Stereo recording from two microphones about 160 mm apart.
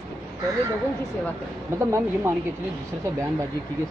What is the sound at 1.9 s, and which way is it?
Speech, 15° right (ahead or behind).